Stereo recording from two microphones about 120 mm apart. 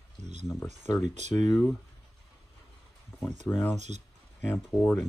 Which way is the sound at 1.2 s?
75° right (ahead or behind).